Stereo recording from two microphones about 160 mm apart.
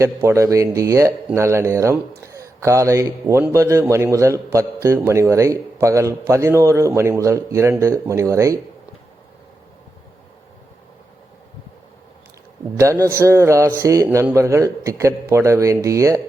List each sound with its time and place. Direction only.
0.0 s a man's voice: 15° right (ahead or behind)
12.8 s a man's voice: 20° right (ahead or behind)